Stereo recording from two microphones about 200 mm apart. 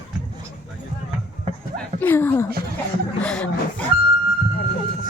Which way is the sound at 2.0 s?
10° left (ahead or behind).